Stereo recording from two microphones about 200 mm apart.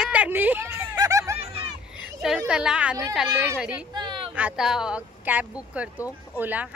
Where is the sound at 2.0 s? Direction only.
Centre (ahead or behind).